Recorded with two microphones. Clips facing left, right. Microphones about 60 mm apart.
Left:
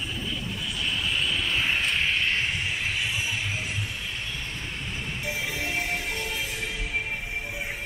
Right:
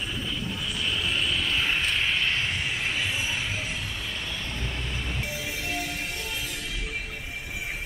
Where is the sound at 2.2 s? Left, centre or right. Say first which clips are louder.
Left 1 dB; left.